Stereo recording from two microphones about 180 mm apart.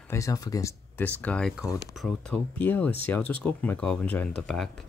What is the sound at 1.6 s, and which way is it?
Speech, 20° left (ahead or behind).